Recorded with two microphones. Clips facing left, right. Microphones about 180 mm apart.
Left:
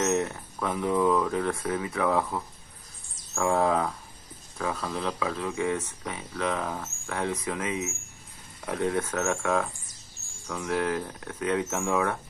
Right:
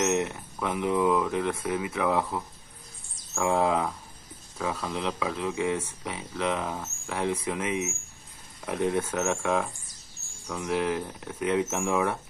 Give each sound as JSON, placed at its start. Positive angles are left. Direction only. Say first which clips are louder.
{"t": 0.0, "sound": "a sound", "louder": "even", "side_deg": -20}
{"t": 0.3, "sound": "speech", "louder": "even", "side_deg": -5}
{"t": 8.7, "sound": "speech", "louder": "right 1 dB", "side_deg": -10}